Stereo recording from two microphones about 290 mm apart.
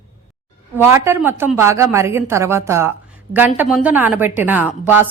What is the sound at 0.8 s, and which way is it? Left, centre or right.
A woman's voice, centre.